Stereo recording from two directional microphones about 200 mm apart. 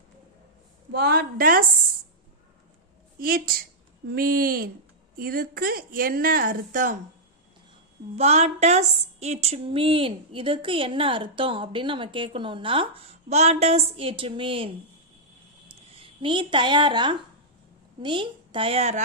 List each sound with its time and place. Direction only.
0.9 s speech: 50° right (ahead or behind)
3.2 s speech: 45° right (ahead or behind)
8.1 s a woman's voice: 30° right (ahead or behind)
15.7 s a woman's voice: 25° right (ahead or behind)